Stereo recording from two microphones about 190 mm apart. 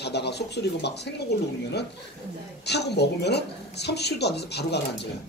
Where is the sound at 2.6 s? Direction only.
60° left (ahead or behind).